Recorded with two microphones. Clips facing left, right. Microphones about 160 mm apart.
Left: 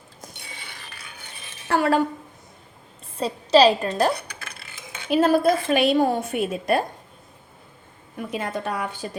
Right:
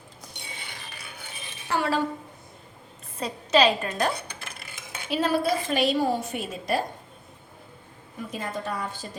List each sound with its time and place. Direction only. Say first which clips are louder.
1.7 s a sound: left 6 dB; 55° left (ahead or behind)
3.2 s a woman's voice: left 5 dB; 30° left (ahead or behind)
5.0 s a woman's voice: left 6 dB; 50° left (ahead or behind)
8.3 s a woman's voice: left 4 dB; 70° left (ahead or behind)